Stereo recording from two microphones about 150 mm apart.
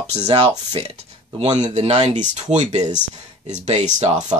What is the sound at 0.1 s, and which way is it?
Speech, 45° right (ahead or behind).